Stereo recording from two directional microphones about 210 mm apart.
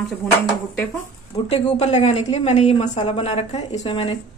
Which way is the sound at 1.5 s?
30° left (ahead or behind).